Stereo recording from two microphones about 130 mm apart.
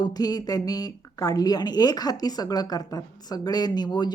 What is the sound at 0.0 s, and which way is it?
A woman's voice, 30° left (ahead or behind).